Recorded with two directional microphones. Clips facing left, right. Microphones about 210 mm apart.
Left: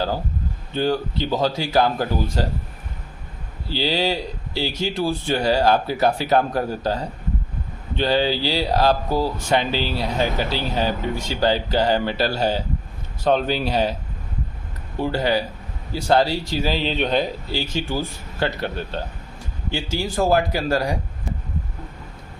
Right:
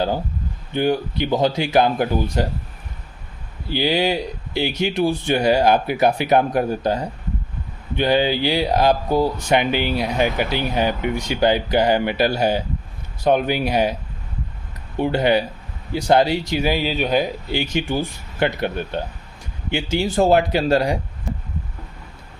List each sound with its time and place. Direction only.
0.7 s speech: 15° right (ahead or behind)
3.7 s speech: 15° right (ahead or behind)
14.9 s speech: 20° right (ahead or behind)